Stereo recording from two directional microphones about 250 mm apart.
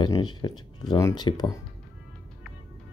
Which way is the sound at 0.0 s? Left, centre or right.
Centre.